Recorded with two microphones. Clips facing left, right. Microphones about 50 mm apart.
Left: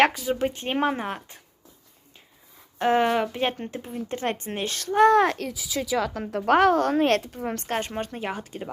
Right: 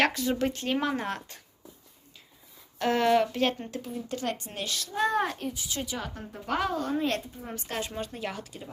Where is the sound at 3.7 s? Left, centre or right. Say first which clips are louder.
Left 3 dB; left.